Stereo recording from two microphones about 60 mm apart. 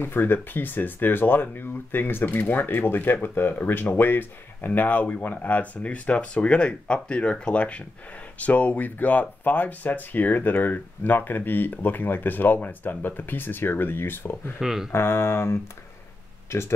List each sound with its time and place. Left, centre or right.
0.0 s speech: left
14.6 s speech: centre
14.9 s mantra: left
16.4 s speech: left